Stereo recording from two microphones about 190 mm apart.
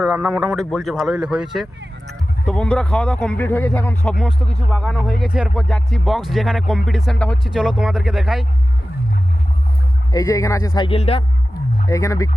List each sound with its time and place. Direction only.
0.0 s speech: 5° right (ahead or behind); by 4.1 s 10° left (ahead or behind)
4.1 s speech: centre (ahead or behind)
10.1 s speech: 15° left (ahead or behind)
10.8 s speech: 30° left (ahead or behind)
11.9 s speech: 15° left (ahead or behind)